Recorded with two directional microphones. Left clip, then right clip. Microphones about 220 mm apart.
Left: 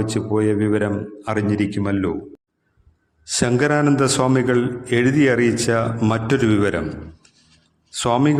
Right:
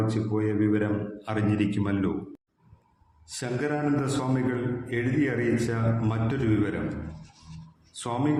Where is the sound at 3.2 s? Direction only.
45° left (ahead or behind).